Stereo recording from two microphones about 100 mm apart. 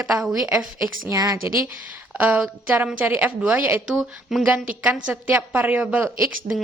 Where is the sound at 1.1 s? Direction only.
35° right (ahead or behind).